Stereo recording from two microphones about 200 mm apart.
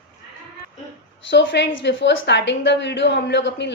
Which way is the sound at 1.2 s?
60° left (ahead or behind).